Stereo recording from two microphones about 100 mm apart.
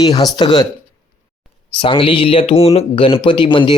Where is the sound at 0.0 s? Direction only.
40° left (ahead or behind).